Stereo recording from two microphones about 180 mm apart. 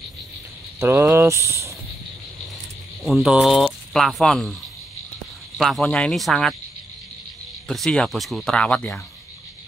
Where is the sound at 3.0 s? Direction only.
Centre (ahead or behind).